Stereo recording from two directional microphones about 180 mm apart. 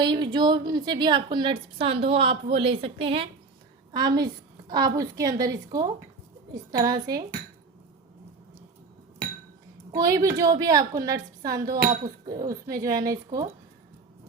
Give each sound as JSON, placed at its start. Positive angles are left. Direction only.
{"t": 0.0, "sound": "a woman's voice", "side_deg": -25}
{"t": 9.9, "sound": "a woman's voice", "side_deg": -20}
{"t": 11.7, "sound": "speech", "side_deg": -50}
{"t": 12.6, "sound": "a woman's voice", "side_deg": -20}